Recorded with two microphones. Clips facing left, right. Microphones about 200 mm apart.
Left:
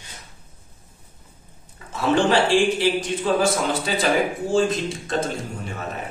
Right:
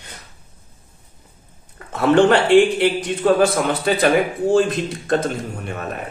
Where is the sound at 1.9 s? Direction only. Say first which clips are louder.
Right 6 dB; 60° right (ahead or behind).